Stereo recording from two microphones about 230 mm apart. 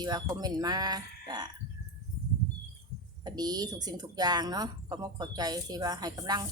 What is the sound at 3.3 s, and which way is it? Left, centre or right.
Speech, centre.